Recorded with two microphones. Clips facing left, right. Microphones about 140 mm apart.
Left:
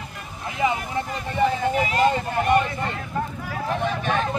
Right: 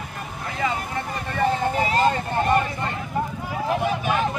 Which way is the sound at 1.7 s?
35° right (ahead or behind).